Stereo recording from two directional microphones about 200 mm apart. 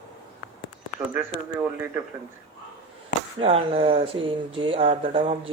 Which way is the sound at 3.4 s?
30° right (ahead or behind).